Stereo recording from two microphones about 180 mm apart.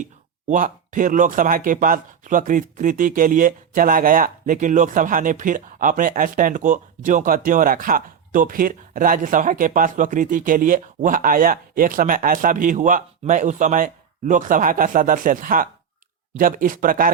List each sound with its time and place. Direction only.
0.0 s speech: 45° right (ahead or behind)